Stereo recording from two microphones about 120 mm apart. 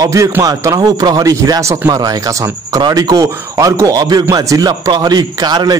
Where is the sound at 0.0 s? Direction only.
25° right (ahead or behind).